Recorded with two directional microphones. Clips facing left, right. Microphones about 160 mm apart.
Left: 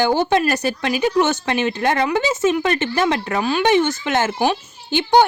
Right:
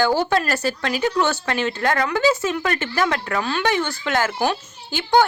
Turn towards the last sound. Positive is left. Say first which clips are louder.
# left 3 dB
turn(degrees=20)  # may be behind; listen again after turning